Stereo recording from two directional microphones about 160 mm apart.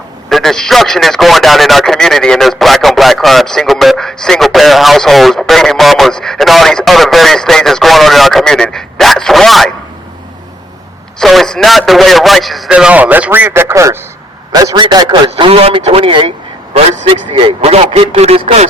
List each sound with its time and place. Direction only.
0.3 s a man's voice: centre (ahead or behind)
11.2 s a man's voice: centre (ahead or behind); by 16.3 s 35° right (ahead or behind)
16.7 s a man's voice: 45° right (ahead or behind)